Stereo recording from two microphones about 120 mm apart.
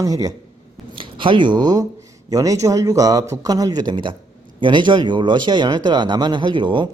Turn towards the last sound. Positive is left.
turn(degrees=-40)  # may be behind; listen again after turning